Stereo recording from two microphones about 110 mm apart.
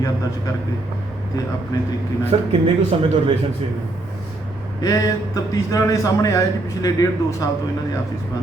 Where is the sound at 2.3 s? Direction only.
65° right (ahead or behind).